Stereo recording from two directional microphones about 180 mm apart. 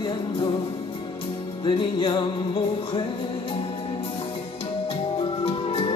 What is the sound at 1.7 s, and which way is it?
Music, 25° left (ahead or behind).